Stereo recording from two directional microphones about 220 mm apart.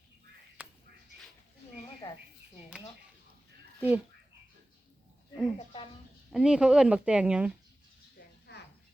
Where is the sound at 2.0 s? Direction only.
15° left (ahead or behind).